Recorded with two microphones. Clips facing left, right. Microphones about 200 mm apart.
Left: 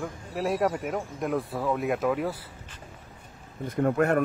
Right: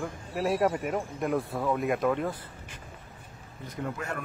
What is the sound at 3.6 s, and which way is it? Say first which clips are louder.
Speech: left 11 dB; 55° left (ahead or behind).